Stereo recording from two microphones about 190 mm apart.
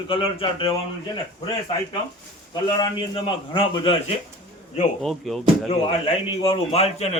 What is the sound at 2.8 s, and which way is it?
A man's voice, 25° left (ahead or behind).